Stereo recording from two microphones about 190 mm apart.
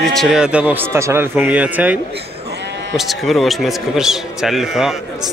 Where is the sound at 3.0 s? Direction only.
Centre (ahead or behind).